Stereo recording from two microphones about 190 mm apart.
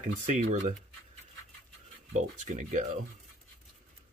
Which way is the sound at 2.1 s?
40° right (ahead or behind).